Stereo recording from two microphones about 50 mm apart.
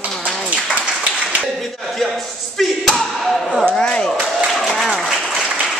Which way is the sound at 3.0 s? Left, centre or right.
Centre.